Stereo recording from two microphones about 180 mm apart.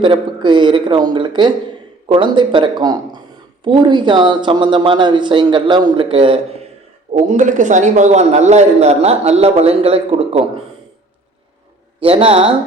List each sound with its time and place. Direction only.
0.0 s speech: 25° right (ahead or behind)
7.1 s a man's voice: 40° right (ahead or behind)
11.9 s a man's voice: 30° right (ahead or behind)